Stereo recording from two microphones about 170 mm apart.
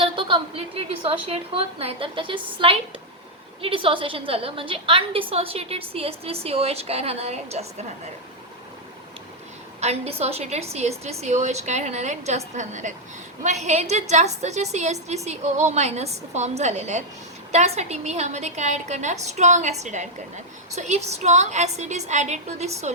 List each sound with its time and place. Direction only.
0.0 s a woman's voice: 30° right (ahead or behind)
9.8 s a woman's voice: 40° right (ahead or behind)